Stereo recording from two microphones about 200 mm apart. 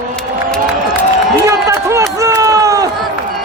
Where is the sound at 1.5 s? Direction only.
15° right (ahead or behind).